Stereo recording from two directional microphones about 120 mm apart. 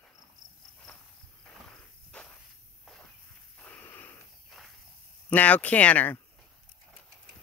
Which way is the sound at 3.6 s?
15° left (ahead or behind).